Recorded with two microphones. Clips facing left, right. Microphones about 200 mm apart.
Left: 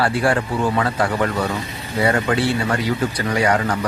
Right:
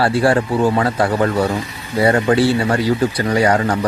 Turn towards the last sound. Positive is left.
turn(degrees=-35)  # may be behind; listen again after turning